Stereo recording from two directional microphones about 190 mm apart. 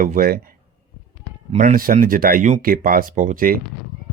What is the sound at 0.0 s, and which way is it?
Speech, 45° right (ahead or behind).